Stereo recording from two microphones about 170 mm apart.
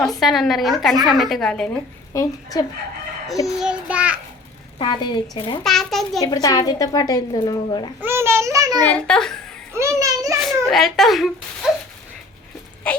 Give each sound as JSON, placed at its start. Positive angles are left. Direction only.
{"t": 0.0, "sound": "a woman's voice", "side_deg": 0}
{"t": 2.1, "sound": "a woman's voice", "side_deg": 20}
{"t": 3.4, "sound": "a child's voice", "side_deg": -5}
{"t": 4.8, "sound": "a woman's voice", "side_deg": 25}
{"t": 5.6, "sound": "a woman's voice", "side_deg": 0}
{"t": 6.1, "sound": "a woman's voice", "side_deg": 20}
{"t": 8.0, "sound": "a child's voice", "side_deg": -15}
{"t": 8.9, "sound": "a woman's voice", "side_deg": 5}
{"t": 9.7, "sound": "a child's voice", "side_deg": -15}
{"t": 10.4, "sound": "a woman's voice", "side_deg": 0}